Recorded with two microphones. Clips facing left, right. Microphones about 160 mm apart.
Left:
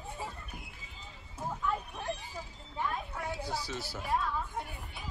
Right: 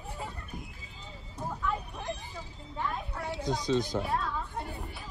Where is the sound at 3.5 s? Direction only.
20° right (ahead or behind).